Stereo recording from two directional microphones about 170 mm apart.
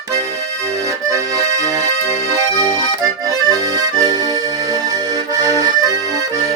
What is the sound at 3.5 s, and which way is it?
Accordion, 20° right (ahead or behind).